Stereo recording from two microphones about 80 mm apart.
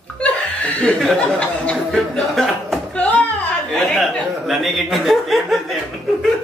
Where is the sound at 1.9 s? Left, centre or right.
Centre.